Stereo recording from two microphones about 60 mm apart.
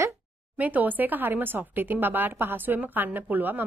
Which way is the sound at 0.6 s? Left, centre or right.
Right.